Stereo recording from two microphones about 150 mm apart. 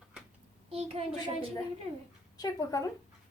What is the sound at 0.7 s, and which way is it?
Speech, 40° right (ahead or behind).